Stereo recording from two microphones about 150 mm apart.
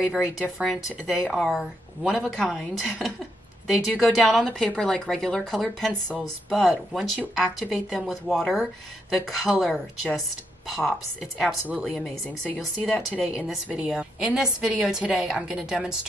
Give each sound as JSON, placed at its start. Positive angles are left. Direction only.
{"t": 0.0, "sound": "speech", "side_deg": -5}